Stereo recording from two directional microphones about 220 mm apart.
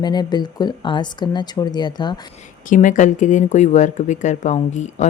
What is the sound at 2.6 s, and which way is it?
Speech, 35° left (ahead or behind).